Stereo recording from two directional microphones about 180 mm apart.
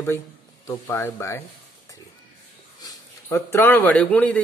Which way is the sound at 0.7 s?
15° left (ahead or behind).